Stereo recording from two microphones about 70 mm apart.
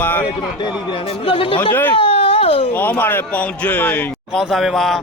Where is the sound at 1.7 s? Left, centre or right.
Left.